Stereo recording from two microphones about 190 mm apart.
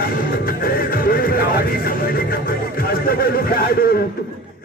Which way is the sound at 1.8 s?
50° left (ahead or behind).